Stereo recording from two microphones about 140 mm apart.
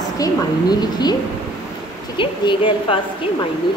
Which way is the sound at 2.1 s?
35° left (ahead or behind).